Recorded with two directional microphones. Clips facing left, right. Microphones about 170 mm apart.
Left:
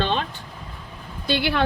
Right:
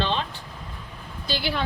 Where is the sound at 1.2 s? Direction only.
60° left (ahead or behind).